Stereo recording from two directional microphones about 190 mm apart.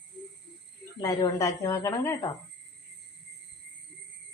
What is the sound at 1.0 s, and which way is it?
Speech, 20° left (ahead or behind).